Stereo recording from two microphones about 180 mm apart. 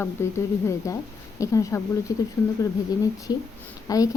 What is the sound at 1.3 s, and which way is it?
Speech, 20° left (ahead or behind).